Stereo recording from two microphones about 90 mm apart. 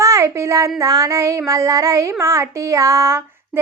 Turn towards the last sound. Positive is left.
turn(degrees=-35)  # may be behind; listen again after turning